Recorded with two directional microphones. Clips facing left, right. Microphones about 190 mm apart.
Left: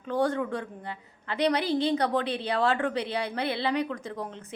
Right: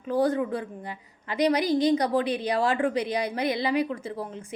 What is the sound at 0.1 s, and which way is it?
A woman's voice, 10° right (ahead or behind).